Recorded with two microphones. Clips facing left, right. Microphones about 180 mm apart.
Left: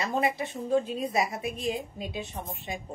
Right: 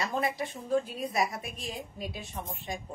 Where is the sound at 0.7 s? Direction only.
20° left (ahead or behind).